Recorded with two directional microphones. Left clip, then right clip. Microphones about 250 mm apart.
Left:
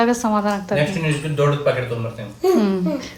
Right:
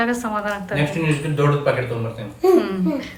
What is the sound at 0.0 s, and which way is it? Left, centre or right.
Speech, centre.